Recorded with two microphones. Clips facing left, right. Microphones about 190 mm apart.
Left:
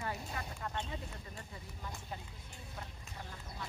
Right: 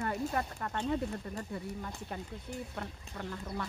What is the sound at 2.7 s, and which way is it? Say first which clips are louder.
Speech: right 7 dB; 70° right (ahead or behind).